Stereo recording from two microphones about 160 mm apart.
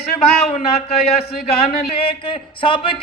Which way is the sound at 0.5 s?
40° left (ahead or behind).